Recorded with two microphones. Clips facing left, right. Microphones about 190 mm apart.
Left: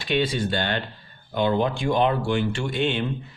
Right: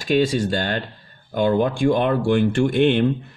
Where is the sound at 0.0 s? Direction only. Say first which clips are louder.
Right 5 dB; 45° right (ahead or behind).